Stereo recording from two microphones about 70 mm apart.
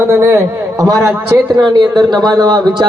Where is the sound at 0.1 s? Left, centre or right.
Right.